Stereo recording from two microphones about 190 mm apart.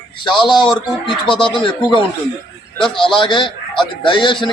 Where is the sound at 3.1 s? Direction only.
25° left (ahead or behind).